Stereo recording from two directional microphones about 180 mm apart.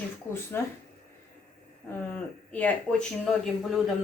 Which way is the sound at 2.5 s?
5° left (ahead or behind).